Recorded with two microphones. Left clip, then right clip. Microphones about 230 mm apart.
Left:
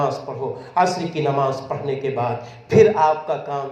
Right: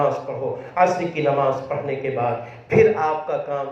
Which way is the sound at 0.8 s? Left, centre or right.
Left.